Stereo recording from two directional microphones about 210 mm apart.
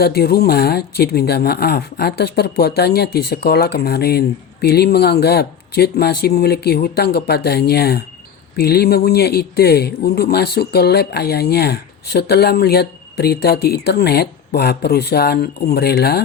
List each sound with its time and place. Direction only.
0.0 s speech: 50° left (ahead or behind)